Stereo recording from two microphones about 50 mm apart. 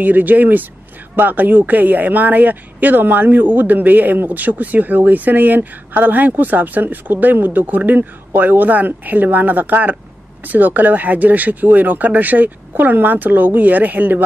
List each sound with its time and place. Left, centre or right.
0.0 s speech: right